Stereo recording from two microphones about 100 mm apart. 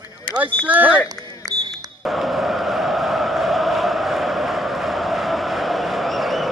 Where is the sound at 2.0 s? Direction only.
Centre (ahead or behind).